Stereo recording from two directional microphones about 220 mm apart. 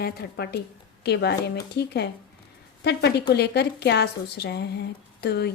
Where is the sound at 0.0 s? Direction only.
45° left (ahead or behind).